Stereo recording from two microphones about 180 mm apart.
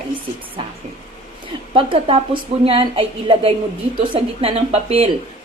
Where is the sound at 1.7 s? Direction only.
30° right (ahead or behind).